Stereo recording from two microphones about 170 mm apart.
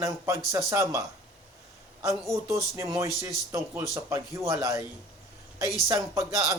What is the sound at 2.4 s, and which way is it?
A man's voice, 15° right (ahead or behind).